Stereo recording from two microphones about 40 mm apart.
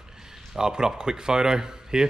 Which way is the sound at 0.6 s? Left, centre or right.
Centre.